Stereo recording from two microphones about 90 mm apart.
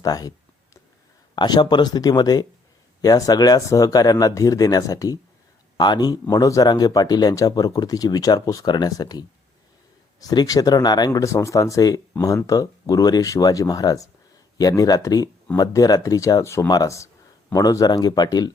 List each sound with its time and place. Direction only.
0.0 s a sound: 45° left (ahead or behind)
1.4 s speech: 55° left (ahead or behind)
11.2 s speech: 35° left (ahead or behind)